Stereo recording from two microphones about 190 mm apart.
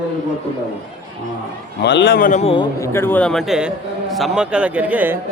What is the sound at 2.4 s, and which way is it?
Speech, 30° left (ahead or behind).